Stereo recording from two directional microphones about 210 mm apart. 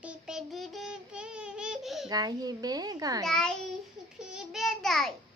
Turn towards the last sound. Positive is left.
turn(degrees=0)  # may be behind; listen again after turning